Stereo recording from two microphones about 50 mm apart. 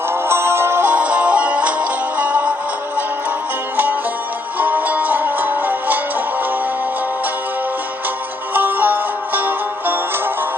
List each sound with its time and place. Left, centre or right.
0.1 s music: right
0.9 s music: right
4.5 s music: right
8.5 s music: right